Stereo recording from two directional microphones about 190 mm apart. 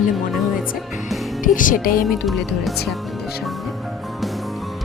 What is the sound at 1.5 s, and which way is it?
Speech, 45° left (ahead or behind).